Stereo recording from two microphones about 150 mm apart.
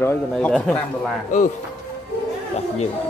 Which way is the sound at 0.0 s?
15° left (ahead or behind).